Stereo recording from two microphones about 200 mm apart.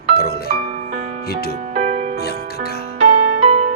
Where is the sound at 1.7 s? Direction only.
35° right (ahead or behind).